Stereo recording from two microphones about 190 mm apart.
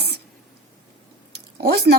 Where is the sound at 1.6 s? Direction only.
60° right (ahead or behind).